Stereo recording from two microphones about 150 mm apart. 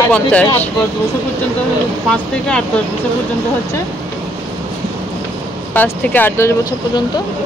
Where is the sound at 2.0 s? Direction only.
5° left (ahead or behind).